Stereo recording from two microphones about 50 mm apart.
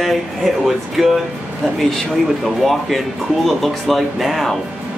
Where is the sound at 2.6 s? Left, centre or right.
Centre.